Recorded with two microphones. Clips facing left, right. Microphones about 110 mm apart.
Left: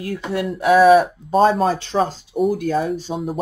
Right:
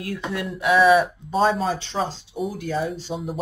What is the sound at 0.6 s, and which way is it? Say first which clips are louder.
Speech: left 5 dB; 35° left (ahead or behind).